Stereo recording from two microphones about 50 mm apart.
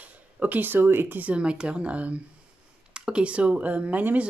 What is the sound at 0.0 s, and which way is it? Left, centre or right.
Speech, right.